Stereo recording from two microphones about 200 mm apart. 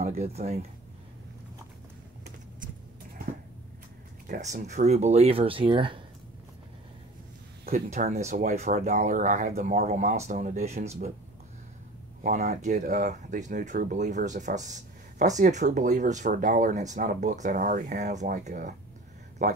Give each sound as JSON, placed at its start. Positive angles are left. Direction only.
{"t": 0.0, "sound": "speech", "side_deg": -35}
{"t": 4.4, "sound": "speech", "side_deg": -35}
{"t": 7.6, "sound": "speech", "side_deg": -45}
{"t": 12.2, "sound": "speech", "side_deg": -40}